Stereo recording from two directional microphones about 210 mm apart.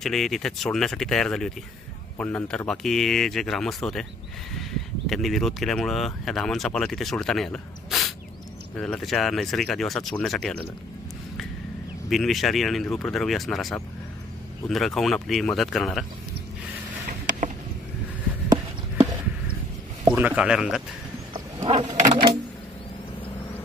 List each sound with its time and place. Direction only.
0.0 s speech: centre (ahead or behind)
12.1 s speech: centre (ahead or behind)
18.9 s a sound: 10° right (ahead or behind)
20.1 s speech: 5° right (ahead or behind)
21.3 s wild animals: 25° right (ahead or behind)
22.0 s a sound: 20° right (ahead or behind)